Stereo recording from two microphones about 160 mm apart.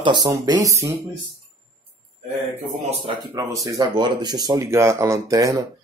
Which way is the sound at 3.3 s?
20° right (ahead or behind).